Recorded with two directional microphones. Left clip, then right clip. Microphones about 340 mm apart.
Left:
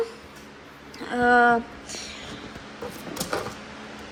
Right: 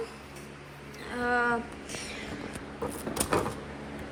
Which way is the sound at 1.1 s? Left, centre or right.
Centre.